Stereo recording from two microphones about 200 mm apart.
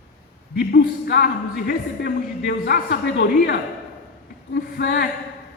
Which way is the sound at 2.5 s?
50° left (ahead or behind).